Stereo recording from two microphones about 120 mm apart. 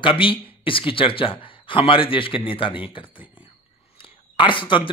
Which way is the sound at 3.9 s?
45° left (ahead or behind).